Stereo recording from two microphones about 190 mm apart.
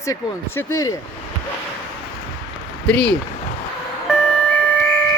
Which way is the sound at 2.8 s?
5° left (ahead or behind).